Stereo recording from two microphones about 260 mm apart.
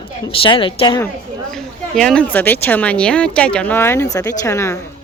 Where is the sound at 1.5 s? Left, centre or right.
Centre.